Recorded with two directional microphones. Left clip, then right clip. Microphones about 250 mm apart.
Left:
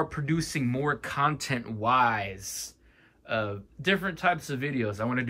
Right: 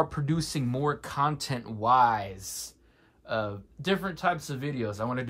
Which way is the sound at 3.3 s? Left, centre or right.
Centre.